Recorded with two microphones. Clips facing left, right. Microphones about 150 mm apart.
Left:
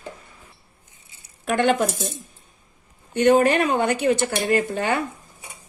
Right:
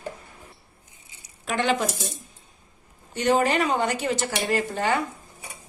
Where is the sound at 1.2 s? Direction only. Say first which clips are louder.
Left 4 dB; 55° left (ahead or behind).